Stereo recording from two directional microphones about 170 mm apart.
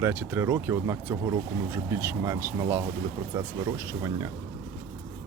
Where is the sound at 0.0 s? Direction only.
10° right (ahead or behind).